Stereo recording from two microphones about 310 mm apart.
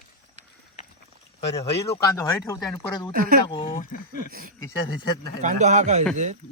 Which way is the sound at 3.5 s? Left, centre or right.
Centre.